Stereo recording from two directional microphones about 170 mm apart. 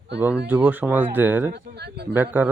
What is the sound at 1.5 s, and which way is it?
Speech, 75° right (ahead or behind).